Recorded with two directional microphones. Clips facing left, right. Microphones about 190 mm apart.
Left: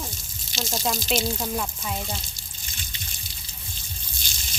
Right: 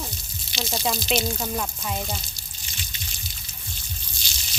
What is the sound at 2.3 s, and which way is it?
Water, 50° left (ahead or behind).